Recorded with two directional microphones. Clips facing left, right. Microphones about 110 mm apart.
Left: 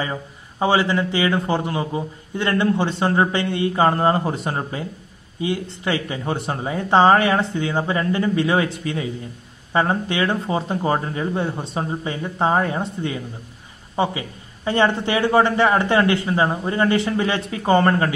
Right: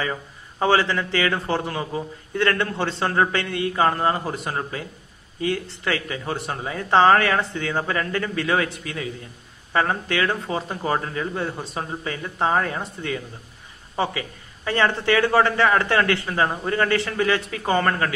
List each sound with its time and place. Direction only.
0.0 s a man's voice: 20° left (ahead or behind)